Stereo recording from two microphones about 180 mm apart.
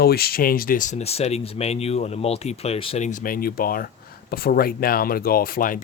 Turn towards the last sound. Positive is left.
turn(degrees=55)  # may be behind; listen again after turning